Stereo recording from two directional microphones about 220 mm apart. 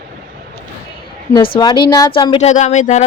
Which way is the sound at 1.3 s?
20° left (ahead or behind).